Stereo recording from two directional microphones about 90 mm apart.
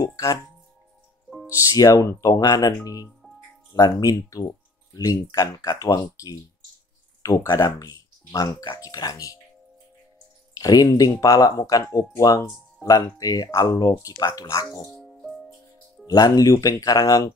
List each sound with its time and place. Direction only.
0.0 s speech: 35° left (ahead or behind)
1.5 s speech: 40° left (ahead or behind)
2.4 s speech: 45° left (ahead or behind)
10.6 s speech: 45° left (ahead or behind)
14.9 s music: centre (ahead or behind)
16.1 s speech: 45° left (ahead or behind)